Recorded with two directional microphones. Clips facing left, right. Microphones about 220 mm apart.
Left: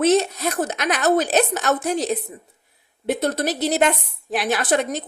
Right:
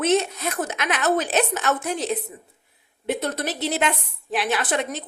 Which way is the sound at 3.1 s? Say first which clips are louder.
Left 5 dB; 40° left (ahead or behind).